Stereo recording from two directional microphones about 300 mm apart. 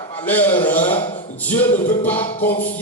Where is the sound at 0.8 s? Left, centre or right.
Centre.